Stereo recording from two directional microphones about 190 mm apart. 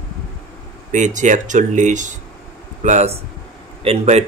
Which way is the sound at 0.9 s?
40° right (ahead or behind).